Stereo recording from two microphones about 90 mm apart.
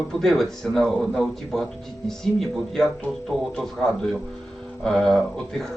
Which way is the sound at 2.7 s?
5° left (ahead or behind).